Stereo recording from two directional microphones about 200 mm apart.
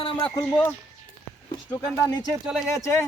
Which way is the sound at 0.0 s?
25° left (ahead or behind).